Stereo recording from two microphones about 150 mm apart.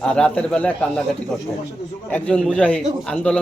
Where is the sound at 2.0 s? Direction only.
10° left (ahead or behind).